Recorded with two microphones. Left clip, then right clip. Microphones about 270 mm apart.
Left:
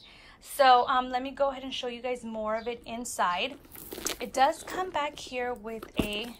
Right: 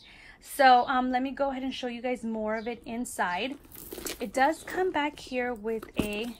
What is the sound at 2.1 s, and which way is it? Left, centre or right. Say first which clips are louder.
A woman's voice: even; centre.